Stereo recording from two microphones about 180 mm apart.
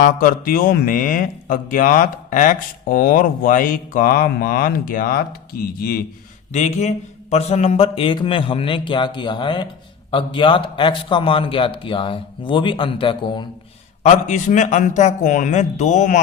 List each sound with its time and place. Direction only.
0.0 s speech: 50° left (ahead or behind)
6.5 s a man's voice: 40° left (ahead or behind)
14.0 s a man's voice: 40° left (ahead or behind)